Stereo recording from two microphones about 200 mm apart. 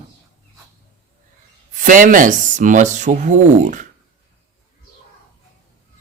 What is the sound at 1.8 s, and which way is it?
Speech, 40° right (ahead or behind).